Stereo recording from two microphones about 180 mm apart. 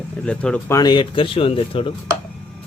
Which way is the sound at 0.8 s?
25° left (ahead or behind).